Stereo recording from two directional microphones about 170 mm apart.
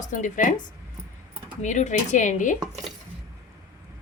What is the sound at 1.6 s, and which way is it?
Speech, 45° left (ahead or behind).